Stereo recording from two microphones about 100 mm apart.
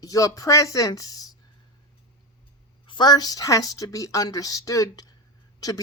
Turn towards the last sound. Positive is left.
turn(degrees=35)  # may be behind; listen again after turning